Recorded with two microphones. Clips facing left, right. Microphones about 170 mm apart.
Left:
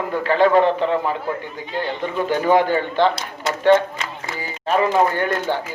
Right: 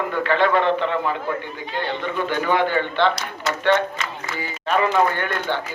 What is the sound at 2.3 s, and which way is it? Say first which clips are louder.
Speech: left 4 dB; 40° left (ahead or behind).